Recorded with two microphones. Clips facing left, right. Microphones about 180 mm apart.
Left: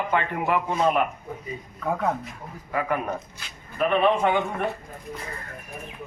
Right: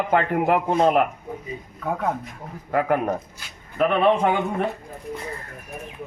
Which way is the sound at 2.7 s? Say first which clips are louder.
Right 5 dB; 55° right (ahead or behind).